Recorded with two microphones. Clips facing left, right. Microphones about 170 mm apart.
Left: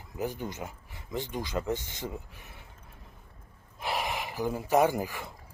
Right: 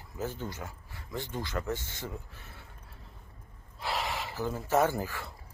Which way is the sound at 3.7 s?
15° left (ahead or behind).